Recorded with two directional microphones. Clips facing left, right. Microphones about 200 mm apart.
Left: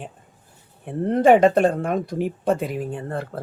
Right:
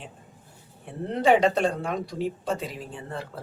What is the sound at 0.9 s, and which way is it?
Speech, 50° left (ahead or behind).